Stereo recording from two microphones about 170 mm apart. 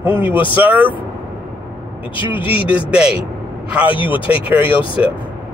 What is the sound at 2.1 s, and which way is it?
Speech, 30° left (ahead or behind).